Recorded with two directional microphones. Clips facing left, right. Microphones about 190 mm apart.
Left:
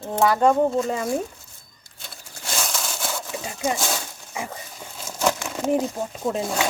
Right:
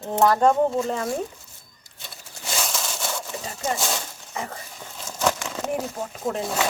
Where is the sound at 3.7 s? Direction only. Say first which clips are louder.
Left 1 dB; centre (ahead or behind).